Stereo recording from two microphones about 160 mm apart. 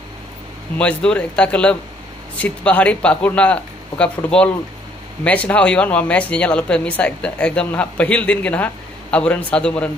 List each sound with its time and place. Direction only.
0.7 s speech: 5° left (ahead or behind)